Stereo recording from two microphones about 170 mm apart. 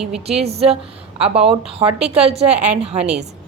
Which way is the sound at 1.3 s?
35° right (ahead or behind).